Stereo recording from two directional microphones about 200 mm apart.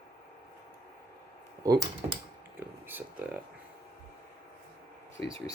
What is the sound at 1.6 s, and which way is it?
Speech, 20° right (ahead or behind).